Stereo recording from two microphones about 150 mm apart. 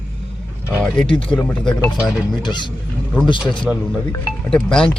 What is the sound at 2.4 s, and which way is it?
Speech, 30° left (ahead or behind).